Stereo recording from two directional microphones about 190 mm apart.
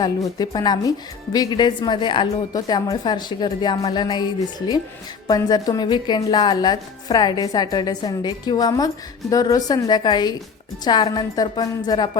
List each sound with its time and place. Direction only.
0.0 s a woman's voice: 20° left (ahead or behind)